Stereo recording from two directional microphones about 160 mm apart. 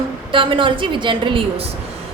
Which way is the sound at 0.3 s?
30° right (ahead or behind).